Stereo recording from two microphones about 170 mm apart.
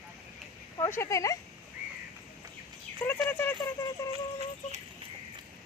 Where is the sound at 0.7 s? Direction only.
15° left (ahead or behind).